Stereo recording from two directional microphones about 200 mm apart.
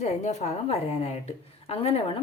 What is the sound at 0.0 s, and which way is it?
A woman's voice, 35° left (ahead or behind).